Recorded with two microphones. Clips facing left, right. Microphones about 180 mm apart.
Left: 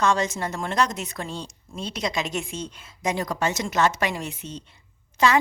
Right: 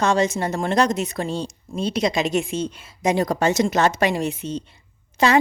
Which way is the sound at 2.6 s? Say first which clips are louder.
Right 6 dB; 30° right (ahead or behind).